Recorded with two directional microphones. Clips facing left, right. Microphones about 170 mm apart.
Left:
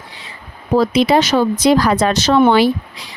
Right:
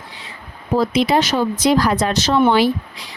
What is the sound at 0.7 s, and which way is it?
Speech, 85° left.